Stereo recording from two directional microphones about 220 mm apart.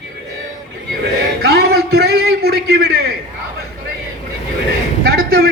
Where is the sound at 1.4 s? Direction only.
45° right (ahead or behind).